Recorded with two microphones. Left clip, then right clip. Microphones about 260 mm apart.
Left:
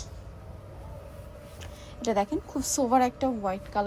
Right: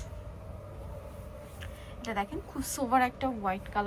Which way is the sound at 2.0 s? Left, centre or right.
Left.